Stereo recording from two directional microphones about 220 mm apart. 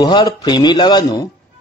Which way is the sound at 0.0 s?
20° left (ahead or behind).